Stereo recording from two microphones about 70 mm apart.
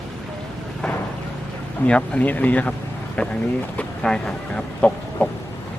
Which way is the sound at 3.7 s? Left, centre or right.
Centre.